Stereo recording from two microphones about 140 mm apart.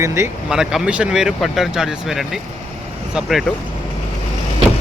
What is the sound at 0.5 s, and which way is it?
Speech, 5° right (ahead or behind).